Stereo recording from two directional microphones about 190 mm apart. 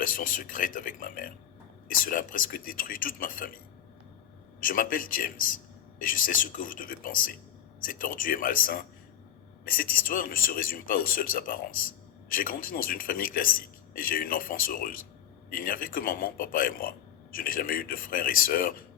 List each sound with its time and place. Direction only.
0.0 s speech: 45° left (ahead or behind)
4.6 s speech: 45° left (ahead or behind)